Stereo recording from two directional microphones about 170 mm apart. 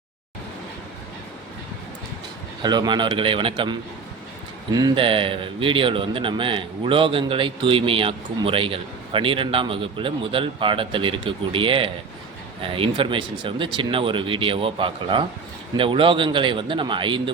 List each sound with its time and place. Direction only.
2.6 s a man's voice: 25° right (ahead or behind)